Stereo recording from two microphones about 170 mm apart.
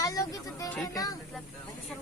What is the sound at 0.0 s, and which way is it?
Speech, 20° left (ahead or behind).